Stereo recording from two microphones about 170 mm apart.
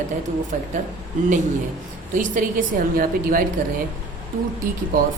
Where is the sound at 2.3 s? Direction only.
50° right (ahead or behind).